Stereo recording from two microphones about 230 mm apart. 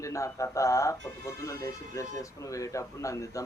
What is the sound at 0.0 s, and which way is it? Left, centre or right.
Speech, centre.